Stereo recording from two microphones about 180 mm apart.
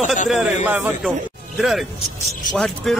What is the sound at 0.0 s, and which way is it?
Speech, 45° left (ahead or behind).